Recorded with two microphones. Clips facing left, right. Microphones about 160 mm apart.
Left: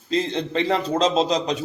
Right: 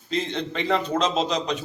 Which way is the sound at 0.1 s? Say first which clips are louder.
Left 4 dB; 35° left (ahead or behind).